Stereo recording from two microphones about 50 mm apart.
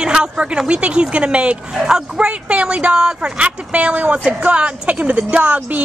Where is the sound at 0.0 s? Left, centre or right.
Centre.